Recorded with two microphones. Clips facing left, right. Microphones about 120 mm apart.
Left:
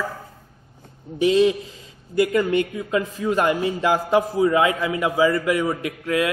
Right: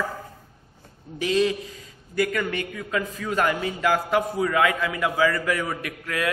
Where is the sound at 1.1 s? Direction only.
25° left (ahead or behind).